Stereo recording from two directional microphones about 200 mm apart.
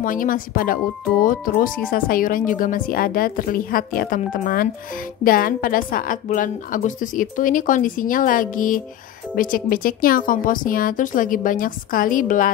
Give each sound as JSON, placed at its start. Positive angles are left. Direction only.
{"t": 0.0, "sound": "a woman's voice", "side_deg": 40}